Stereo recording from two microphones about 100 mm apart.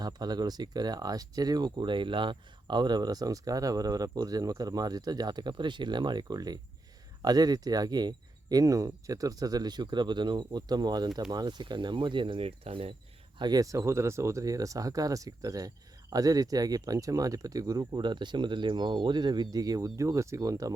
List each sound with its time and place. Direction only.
0.0 s speech: 45° right (ahead or behind); by 12.9 s 80° right
13.4 s speech: 40° right (ahead or behind)